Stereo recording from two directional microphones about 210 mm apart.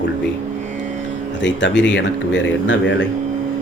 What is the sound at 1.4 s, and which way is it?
A man's voice, 60° left (ahead or behind).